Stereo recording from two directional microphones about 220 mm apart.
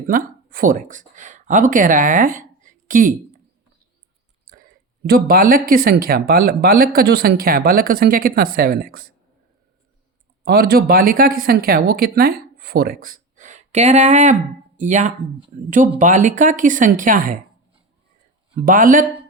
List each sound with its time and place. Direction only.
0.1 s speech: 40° right (ahead or behind)
5.0 s speech: 45° right (ahead or behind)
10.4 s speech: 45° right (ahead or behind)
18.5 s speech: 40° right (ahead or behind)